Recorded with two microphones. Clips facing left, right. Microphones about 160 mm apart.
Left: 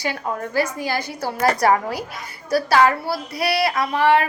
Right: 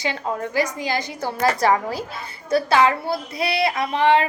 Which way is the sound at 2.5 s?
20° right (ahead or behind).